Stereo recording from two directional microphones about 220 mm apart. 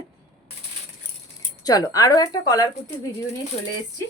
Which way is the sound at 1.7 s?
15° left (ahead or behind).